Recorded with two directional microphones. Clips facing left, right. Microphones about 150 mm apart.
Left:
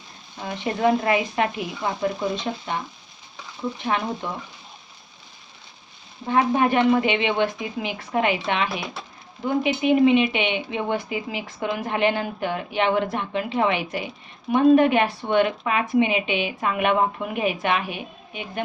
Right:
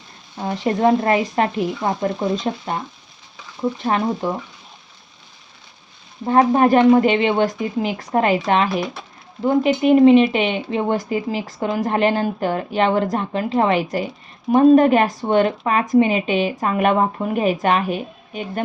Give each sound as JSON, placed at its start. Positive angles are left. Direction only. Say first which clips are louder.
{"t": 0.4, "sound": "a woman's voice", "louder": "right 4 dB", "side_deg": -40}
{"t": 3.8, "sound": "a woman's voice", "louder": "right 4 dB", "side_deg": -40}
{"t": 6.2, "sound": "a woman's voice", "louder": "right 6 dB", "side_deg": -40}